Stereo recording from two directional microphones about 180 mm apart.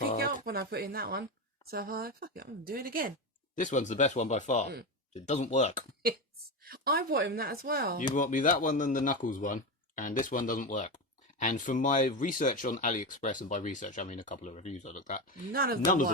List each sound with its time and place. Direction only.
0.2 s a woman's voice: 55° right (ahead or behind)
3.5 s speech: 45° left (ahead or behind)
6.7 s a woman's voice: 55° right (ahead or behind)
8.1 s speech: 45° left (ahead or behind)
15.5 s a woman's voice: 55° right (ahead or behind)